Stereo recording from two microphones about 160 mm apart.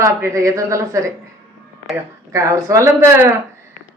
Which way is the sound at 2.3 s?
20° right (ahead or behind).